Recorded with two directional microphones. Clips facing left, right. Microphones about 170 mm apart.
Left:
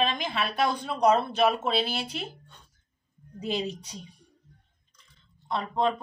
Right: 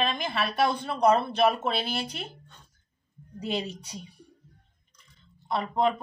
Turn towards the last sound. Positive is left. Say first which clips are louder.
# right 1 dB
turn(degrees=-10)  # may be behind; listen again after turning